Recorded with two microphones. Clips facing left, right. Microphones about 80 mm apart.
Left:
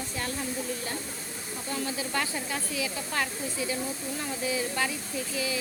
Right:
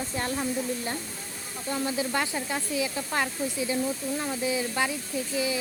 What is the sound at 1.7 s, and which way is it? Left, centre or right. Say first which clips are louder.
Speech: right 4 dB; right.